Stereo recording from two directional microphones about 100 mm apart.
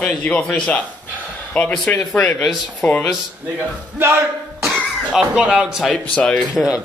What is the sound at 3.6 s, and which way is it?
Speech, 25° right (ahead or behind).